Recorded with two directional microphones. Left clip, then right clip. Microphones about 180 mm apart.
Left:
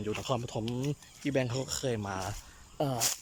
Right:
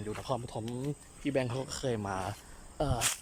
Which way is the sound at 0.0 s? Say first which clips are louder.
Left 3 dB; 10° left (ahead or behind).